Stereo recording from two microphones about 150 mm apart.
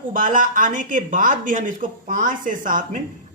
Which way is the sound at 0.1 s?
60° right (ahead or behind).